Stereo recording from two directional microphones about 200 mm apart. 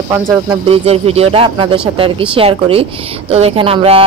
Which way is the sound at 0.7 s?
30° right (ahead or behind).